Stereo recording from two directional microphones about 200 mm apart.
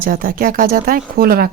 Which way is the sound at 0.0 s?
45° right (ahead or behind).